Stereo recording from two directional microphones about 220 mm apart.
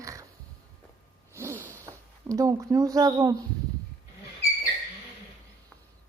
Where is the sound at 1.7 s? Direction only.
15° right (ahead or behind).